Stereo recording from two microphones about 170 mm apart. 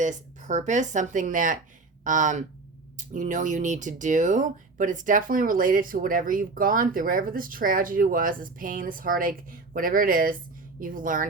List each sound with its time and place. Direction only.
0.0 s speech: 45° right (ahead or behind)